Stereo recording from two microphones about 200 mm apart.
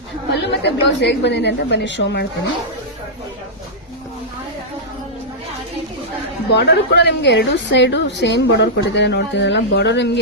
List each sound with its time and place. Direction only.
0.3 s a woman's voice: 60° left (ahead or behind)
6.5 s a woman's voice: 55° left (ahead or behind)